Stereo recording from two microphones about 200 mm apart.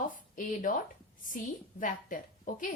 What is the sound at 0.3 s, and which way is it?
Speech, 40° left (ahead or behind).